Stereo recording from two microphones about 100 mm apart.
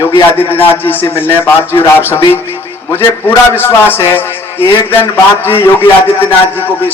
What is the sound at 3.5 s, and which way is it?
A man's voice, 20° left (ahead or behind).